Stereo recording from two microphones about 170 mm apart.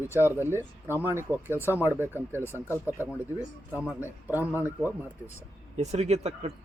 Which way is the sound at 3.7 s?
10° right (ahead or behind).